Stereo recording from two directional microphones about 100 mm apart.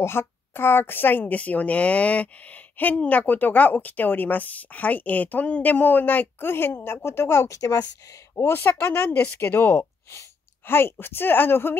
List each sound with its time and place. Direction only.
0.0 s a woman's voice: 25° left (ahead or behind)
8.4 s a woman's voice: 25° left (ahead or behind)